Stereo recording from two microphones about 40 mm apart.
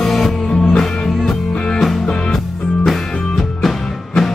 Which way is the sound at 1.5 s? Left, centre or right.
Left.